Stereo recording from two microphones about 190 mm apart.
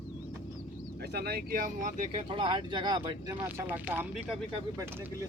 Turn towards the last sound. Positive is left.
turn(degrees=-5)  # may be behind; listen again after turning